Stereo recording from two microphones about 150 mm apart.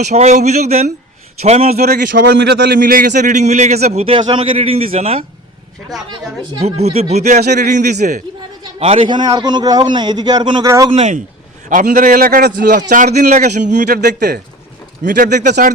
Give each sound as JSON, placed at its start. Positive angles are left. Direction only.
{"t": 0.1, "sound": "speech", "side_deg": -50}
{"t": 1.8, "sound": "a man's voice", "side_deg": -90}
{"t": 6.6, "sound": "speech", "side_deg": -45}
{"t": 8.6, "sound": "a man's voice", "side_deg": -35}
{"t": 10.9, "sound": "speech", "side_deg": -50}
{"t": 11.7, "sound": "a man's voice", "side_deg": -65}
{"t": 12.9, "sound": "speech", "side_deg": -75}
{"t": 13.3, "sound": "speech", "side_deg": -55}
{"t": 13.8, "sound": "speech", "side_deg": -90}
{"t": 15.0, "sound": "speech", "side_deg": -60}